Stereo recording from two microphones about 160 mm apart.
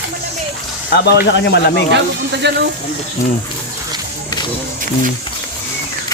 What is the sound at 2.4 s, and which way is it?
Speech, 90° right.